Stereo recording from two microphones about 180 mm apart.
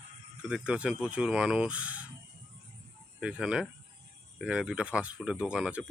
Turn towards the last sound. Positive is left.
turn(degrees=-5)  # may be behind; listen again after turning